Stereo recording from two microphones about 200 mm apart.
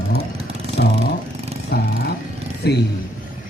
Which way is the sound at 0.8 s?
55° left (ahead or behind).